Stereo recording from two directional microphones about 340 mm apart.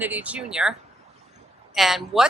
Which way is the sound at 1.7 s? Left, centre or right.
Centre.